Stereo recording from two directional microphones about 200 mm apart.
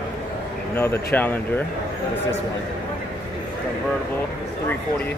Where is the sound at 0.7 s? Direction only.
10° left (ahead or behind).